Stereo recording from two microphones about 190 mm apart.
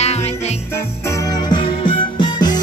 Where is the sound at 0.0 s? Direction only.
35° left (ahead or behind).